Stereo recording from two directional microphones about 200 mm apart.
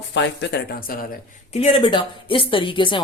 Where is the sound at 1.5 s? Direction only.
30° left (ahead or behind).